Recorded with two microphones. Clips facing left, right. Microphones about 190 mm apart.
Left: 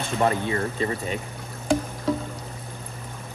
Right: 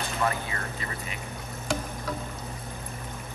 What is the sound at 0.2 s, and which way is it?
Speech, 30° left (ahead or behind).